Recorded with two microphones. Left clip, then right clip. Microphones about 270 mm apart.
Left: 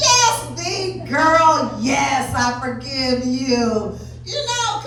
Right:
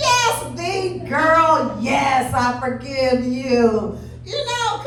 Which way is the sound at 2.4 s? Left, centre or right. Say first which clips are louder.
Right 1 dB; right.